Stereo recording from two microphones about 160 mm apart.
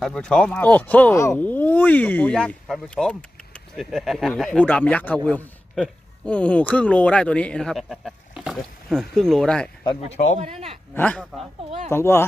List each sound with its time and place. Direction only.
0.0 s a man's voice: 5° left (ahead or behind)
10.4 s speech: 40° right (ahead or behind)
10.9 s a man's voice: 10° left (ahead or behind)